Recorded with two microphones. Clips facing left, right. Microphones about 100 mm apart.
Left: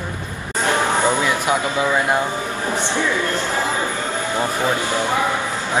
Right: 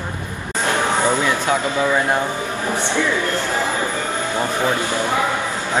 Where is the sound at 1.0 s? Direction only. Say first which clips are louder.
Even; 15° left (ahead or behind).